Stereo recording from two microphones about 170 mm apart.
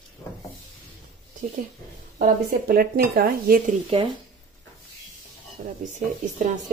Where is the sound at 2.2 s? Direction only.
60° right (ahead or behind).